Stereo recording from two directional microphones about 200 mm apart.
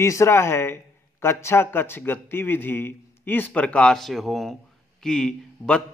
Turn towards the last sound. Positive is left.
turn(degrees=5)  # may be behind; listen again after turning